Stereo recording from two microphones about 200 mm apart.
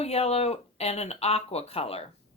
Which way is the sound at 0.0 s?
30° left (ahead or behind).